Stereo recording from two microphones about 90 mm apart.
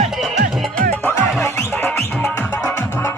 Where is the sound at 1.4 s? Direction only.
25° left (ahead or behind).